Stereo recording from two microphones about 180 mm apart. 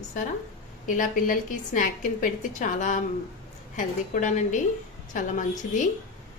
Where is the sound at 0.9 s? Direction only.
45° left (ahead or behind).